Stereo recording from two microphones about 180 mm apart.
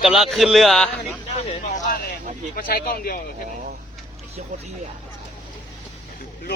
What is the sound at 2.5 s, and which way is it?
Speech, 55° left (ahead or behind).